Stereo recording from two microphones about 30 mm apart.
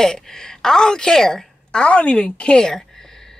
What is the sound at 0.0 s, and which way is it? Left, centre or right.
A woman's voice, centre.